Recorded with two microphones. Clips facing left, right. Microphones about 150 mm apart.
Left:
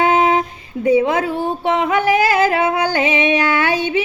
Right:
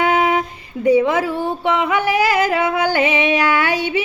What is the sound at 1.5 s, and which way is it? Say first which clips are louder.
Child singing: left 1 dB; 45° left (ahead or behind).